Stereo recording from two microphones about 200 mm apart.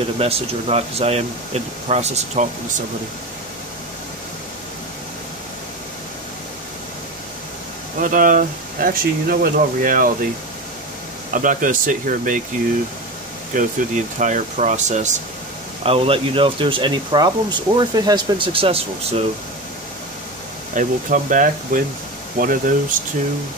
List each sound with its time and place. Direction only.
0.2 s speech: 30° right (ahead or behind)
8.0 s speech: 40° right (ahead or behind)
11.3 s speech: 40° right (ahead or behind)
13.5 s speech: 40° right (ahead or behind)
20.7 s speech: 40° right (ahead or behind)